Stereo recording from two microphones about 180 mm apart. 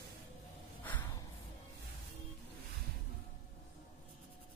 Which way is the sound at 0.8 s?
10° left (ahead or behind).